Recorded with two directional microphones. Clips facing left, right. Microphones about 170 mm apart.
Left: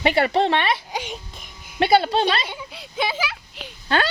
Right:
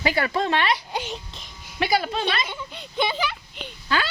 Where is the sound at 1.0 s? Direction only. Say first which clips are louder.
Even; 5° left (ahead or behind).